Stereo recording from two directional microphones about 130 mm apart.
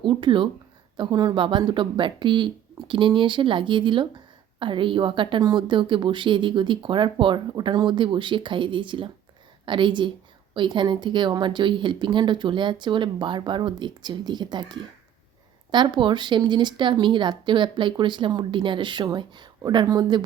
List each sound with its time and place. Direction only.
0.0 s a woman's voice: 40° right (ahead or behind)